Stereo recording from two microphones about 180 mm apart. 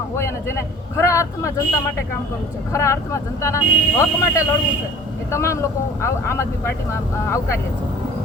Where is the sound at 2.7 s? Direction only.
15° left (ahead or behind).